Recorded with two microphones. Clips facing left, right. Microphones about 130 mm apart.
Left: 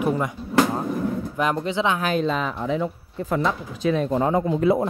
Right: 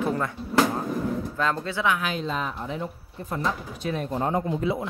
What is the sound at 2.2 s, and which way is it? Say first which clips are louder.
Speech: left 5 dB; 90° left.